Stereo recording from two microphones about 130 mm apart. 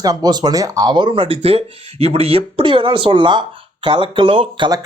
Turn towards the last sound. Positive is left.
turn(degrees=-40)  # may be behind; listen again after turning